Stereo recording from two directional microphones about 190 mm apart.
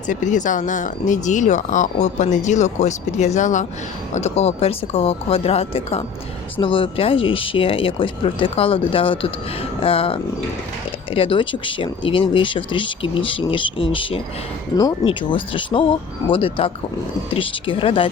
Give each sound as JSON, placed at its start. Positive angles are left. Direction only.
{"t": 0.1, "sound": "speech", "side_deg": 40}